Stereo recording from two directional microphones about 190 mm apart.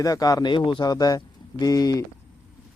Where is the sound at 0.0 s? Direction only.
20° left (ahead or behind).